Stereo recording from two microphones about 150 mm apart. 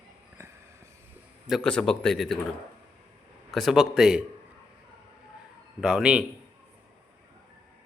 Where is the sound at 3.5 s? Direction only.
Centre (ahead or behind).